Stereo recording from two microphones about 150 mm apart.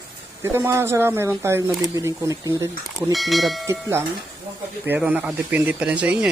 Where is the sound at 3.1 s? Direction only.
Centre (ahead or behind).